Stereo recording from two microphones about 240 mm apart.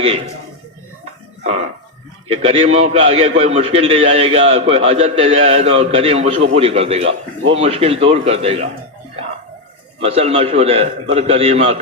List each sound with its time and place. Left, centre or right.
2.2 s a man's voice: right
10.0 s a man's voice: right